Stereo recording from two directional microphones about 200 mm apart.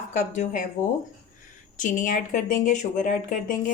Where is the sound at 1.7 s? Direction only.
40° left (ahead or behind).